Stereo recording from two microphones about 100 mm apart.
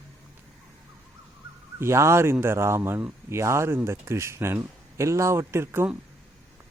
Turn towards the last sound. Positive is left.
turn(degrees=-20)  # may be behind; listen again after turning